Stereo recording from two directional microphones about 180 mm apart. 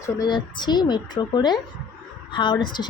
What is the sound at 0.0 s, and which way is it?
Speech, 20° left (ahead or behind).